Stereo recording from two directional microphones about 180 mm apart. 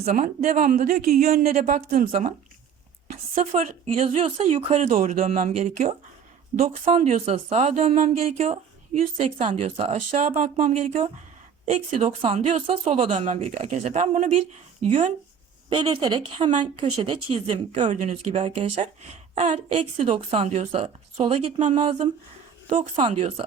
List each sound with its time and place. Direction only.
0.1 s a woman's voice: 50° right (ahead or behind)
15.7 s speech: 25° right (ahead or behind)